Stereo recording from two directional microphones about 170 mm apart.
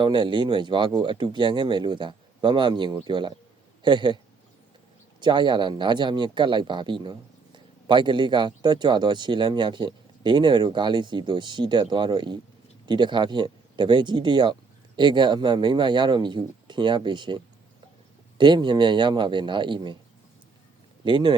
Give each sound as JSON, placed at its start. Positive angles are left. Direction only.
{"t": 0.0, "sound": "speech", "side_deg": -30}
{"t": 5.2, "sound": "speech", "side_deg": -25}
{"t": 21.0, "sound": "speech", "side_deg": -30}